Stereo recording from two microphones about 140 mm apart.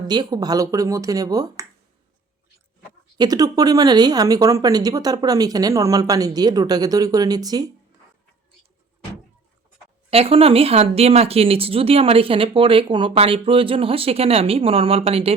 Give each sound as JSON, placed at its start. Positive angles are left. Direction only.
{"t": 0.1, "sound": "speech", "side_deg": -30}
{"t": 3.2, "sound": "speech", "side_deg": -25}
{"t": 10.1, "sound": "speech", "side_deg": -45}